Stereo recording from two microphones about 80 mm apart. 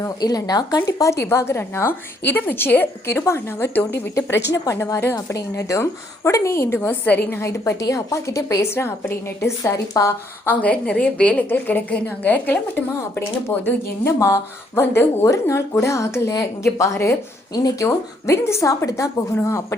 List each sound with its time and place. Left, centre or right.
0.0 s speech: left
0.9 s a woman's voice: left
4.1 s a woman's voice: left
8.7 s a woman's voice: left
10.4 s a woman's voice: centre; by 17.2 s left
17.5 s speech: left
17.8 s a woman's voice: left